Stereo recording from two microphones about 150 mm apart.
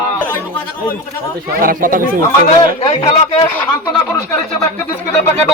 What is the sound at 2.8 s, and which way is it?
Speech, 40° left (ahead or behind).